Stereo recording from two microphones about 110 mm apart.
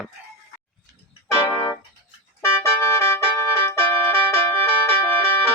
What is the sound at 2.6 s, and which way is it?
Music, 25° left (ahead or behind).